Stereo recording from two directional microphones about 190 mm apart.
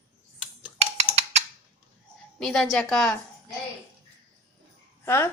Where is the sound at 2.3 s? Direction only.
Centre (ahead or behind).